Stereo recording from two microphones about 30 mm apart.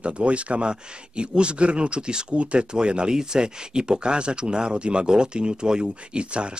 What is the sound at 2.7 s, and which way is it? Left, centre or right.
Speech, right.